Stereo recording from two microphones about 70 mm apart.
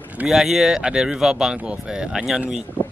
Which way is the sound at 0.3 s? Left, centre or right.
Centre.